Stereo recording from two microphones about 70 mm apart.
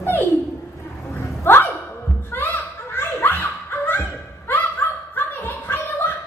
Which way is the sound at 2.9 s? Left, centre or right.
Left.